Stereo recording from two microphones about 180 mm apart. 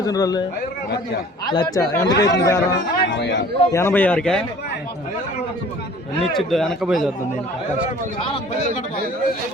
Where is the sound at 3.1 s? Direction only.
70° left (ahead or behind).